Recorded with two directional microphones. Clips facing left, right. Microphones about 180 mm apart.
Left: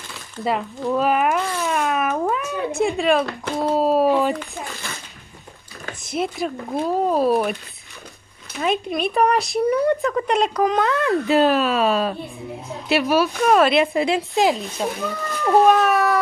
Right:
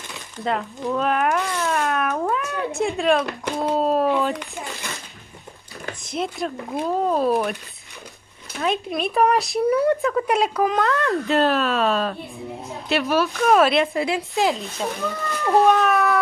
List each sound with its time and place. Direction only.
0.4 s speech: 5° left (ahead or behind)
0.9 s cat: 5° left (ahead or behind)
3.7 s speech: 5° left (ahead or behind)
6.0 s speech: 5° left (ahead or behind)
8.5 s speech: centre (ahead or behind)
13.3 s speech: centre (ahead or behind)
13.9 s a woman's voice: 20° left (ahead or behind)
14.6 s speech: centre (ahead or behind)